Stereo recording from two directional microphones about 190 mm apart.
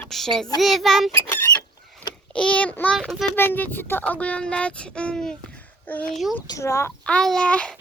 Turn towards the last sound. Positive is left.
turn(degrees=5)  # may be behind; listen again after turning